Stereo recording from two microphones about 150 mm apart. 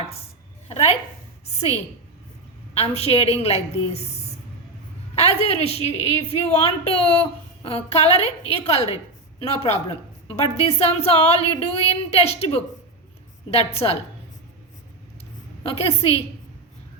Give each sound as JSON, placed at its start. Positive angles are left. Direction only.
{"t": 0.7, "sound": "a woman's voice", "side_deg": 40}
{"t": 15.7, "sound": "a woman's voice", "side_deg": 40}